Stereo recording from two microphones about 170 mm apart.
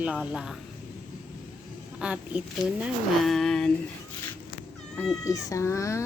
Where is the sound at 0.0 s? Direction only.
5° right (ahead or behind).